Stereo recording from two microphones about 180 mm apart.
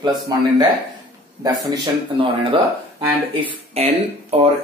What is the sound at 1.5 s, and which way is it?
Speech, 25° right (ahead or behind).